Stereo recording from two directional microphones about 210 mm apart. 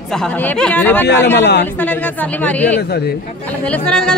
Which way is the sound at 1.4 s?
55° left (ahead or behind).